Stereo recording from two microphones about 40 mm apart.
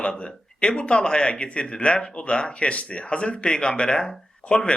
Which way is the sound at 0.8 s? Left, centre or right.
Left.